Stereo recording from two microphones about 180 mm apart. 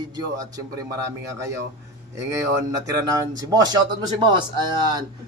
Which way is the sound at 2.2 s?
15° right (ahead or behind).